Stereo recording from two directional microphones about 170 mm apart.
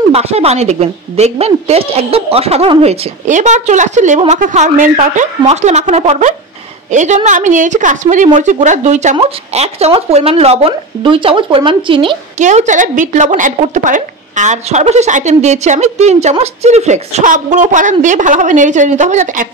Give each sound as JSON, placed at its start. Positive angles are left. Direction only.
{"t": 0.1, "sound": "a woman's voice", "side_deg": -35}
{"t": 12.4, "sound": "a woman's voice", "side_deg": -45}